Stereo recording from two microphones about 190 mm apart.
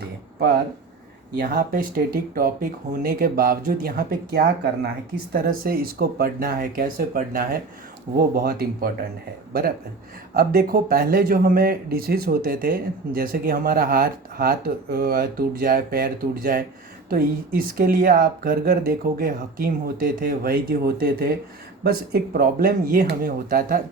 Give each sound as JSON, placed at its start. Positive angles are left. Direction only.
{"t": 1.4, "sound": "speech", "side_deg": -50}